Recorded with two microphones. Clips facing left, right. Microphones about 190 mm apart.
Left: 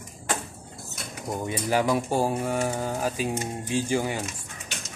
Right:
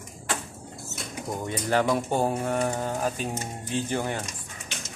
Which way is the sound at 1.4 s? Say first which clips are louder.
Even; 10° left (ahead or behind).